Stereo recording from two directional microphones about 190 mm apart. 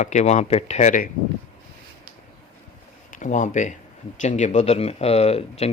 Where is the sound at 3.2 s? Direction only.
45° left (ahead or behind).